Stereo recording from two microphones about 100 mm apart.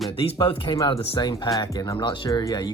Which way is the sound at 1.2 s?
45° left (ahead or behind).